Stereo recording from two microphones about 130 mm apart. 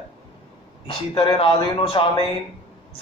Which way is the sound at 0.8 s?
45° left (ahead or behind).